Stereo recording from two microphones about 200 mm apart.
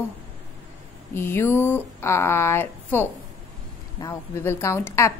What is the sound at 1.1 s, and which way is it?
Speech, 10° left (ahead or behind).